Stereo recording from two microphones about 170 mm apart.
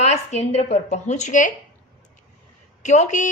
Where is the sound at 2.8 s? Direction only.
45° left (ahead or behind).